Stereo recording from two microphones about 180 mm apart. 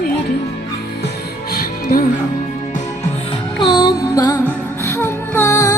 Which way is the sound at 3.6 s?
25° left (ahead or behind).